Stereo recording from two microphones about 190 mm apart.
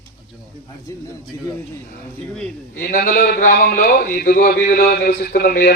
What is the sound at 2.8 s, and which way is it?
A man's voice, 45° left (ahead or behind).